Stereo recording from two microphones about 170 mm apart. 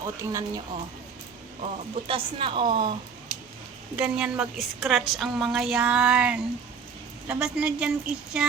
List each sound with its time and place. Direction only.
0.0 s speech: 20° right (ahead or behind)
1.6 s speech: 30° right (ahead or behind)
3.9 s a woman's voice: 5° right (ahead or behind)